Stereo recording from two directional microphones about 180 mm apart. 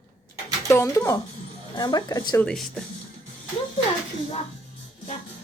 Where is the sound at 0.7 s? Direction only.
15° left (ahead or behind).